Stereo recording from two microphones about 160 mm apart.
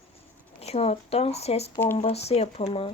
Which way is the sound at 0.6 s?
40° left (ahead or behind).